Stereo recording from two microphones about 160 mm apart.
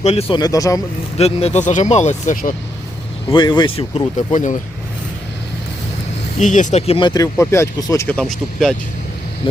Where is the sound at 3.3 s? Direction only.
30° left (ahead or behind).